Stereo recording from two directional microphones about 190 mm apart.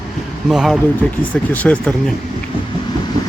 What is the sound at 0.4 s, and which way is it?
Speech, centre (ahead or behind).